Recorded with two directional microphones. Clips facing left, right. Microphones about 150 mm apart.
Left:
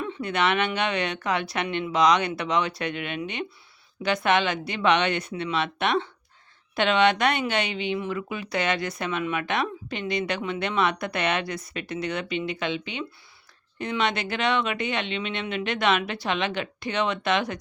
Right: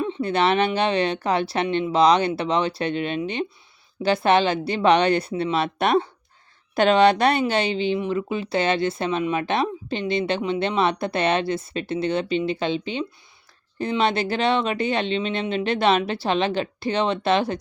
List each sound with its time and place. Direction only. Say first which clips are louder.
0.0 s speech: right 4 dB; 25° right (ahead or behind)